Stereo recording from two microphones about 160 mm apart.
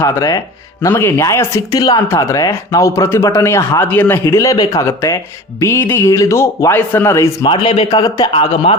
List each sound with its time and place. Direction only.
0.0 s speech: 20° left (ahead or behind)
7.4 s speech: 30° left (ahead or behind)